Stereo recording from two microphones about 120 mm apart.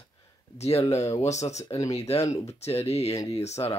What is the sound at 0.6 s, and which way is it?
Speech, 60° left (ahead or behind).